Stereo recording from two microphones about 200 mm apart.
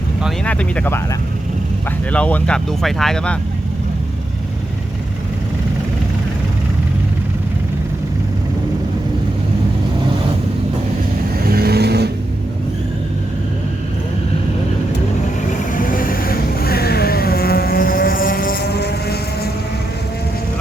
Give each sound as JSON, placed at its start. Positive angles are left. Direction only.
{"t": 0.2, "sound": "speech", "side_deg": 0}
{"t": 2.1, "sound": "speech", "side_deg": 5}
{"t": 11.4, "sound": "vehicle", "side_deg": -50}
{"t": 15.7, "sound": "vehicle", "side_deg": 45}